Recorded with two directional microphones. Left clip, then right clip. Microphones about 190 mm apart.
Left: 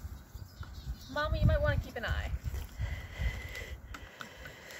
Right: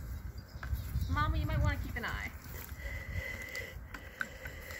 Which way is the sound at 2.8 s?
5° left (ahead or behind).